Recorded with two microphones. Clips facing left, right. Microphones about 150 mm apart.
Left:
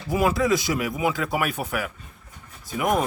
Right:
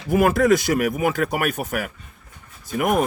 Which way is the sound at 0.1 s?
55° right (ahead or behind).